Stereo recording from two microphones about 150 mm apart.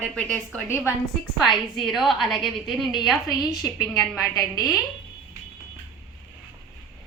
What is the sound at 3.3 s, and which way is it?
Speech, 25° left (ahead or behind).